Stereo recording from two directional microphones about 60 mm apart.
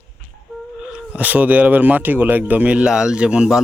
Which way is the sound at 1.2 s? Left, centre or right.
Right.